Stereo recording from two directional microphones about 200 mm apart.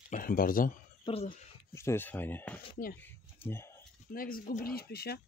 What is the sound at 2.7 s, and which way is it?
Speech, 50° left (ahead or behind).